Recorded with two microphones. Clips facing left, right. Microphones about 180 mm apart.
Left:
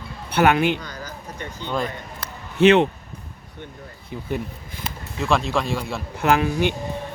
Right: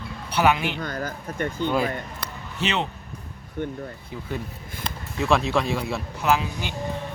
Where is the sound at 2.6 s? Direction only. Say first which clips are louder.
Left 12 dB; 60° left (ahead or behind).